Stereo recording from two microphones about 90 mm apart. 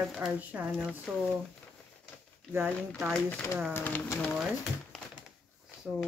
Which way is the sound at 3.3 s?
25° left (ahead or behind).